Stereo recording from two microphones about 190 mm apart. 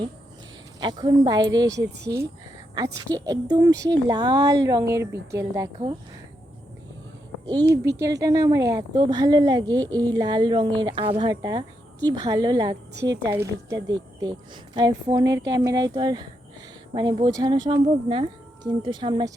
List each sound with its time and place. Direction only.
0.8 s speech: 20° right (ahead or behind)
7.7 s speech: 15° right (ahead or behind)